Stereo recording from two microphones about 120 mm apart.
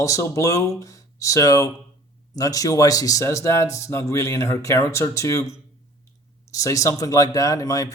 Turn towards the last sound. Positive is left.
turn(degrees=30)  # may be behind; listen again after turning